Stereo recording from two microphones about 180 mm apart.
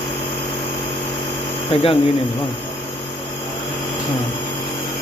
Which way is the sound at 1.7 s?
30° left (ahead or behind).